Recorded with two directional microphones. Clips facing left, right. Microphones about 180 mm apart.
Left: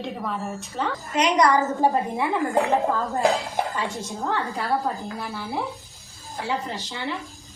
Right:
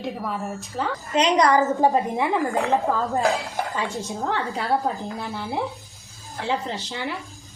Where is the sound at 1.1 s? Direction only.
25° right (ahead or behind).